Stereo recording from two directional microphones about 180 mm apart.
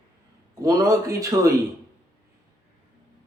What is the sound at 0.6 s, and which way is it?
Speech, 15° right (ahead or behind).